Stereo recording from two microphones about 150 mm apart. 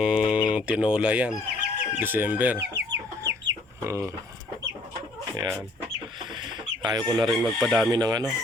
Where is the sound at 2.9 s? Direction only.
20° right (ahead or behind).